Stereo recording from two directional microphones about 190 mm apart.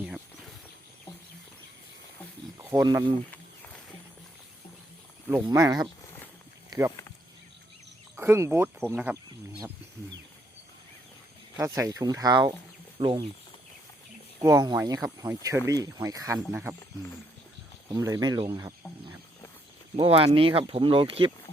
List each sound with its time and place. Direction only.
0.0 s a sound: centre (ahead or behind)
2.6 s speech: 15° right (ahead or behind)
3.3 s a sound: 10° left (ahead or behind)
5.4 s speech: 20° right (ahead or behind)
8.1 s speech: 10° right (ahead or behind)
11.5 s speech: 20° right (ahead or behind)
14.4 s speech: 20° right (ahead or behind)
17.9 s speech: 20° right (ahead or behind)
20.0 s speech: 30° right (ahead or behind)